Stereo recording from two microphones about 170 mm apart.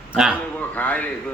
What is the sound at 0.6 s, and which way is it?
Speech, 10° left (ahead or behind).